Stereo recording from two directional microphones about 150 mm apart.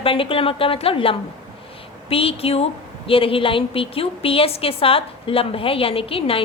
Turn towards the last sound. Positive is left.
turn(degrees=40)  # may be behind; listen again after turning